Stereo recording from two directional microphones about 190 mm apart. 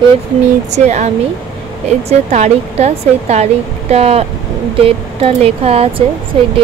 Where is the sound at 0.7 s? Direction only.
35° right (ahead or behind).